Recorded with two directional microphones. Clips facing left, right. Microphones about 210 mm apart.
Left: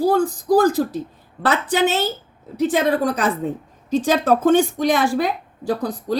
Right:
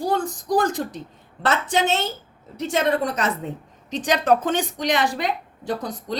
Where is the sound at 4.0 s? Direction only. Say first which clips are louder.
Left 2 dB; 15° right (ahead or behind).